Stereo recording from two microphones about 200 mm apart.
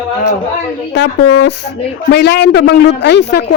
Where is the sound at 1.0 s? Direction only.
60° left (ahead or behind).